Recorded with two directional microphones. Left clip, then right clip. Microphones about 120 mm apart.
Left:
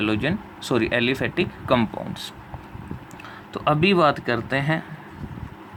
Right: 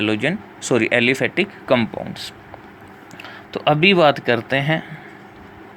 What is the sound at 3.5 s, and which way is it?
Speech, 25° right (ahead or behind).